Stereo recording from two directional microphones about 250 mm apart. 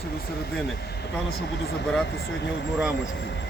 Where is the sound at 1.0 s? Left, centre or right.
Left.